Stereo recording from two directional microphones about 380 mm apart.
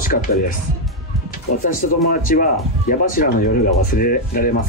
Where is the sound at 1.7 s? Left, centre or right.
Left.